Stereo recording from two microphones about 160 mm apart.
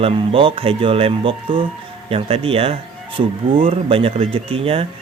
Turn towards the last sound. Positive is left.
turn(degrees=-35)  # may be behind; listen again after turning